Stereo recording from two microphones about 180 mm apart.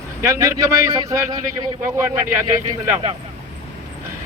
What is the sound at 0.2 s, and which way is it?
A man's voice, 15° right (ahead or behind).